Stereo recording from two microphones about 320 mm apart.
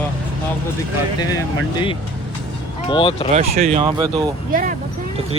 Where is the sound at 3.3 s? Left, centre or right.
Centre.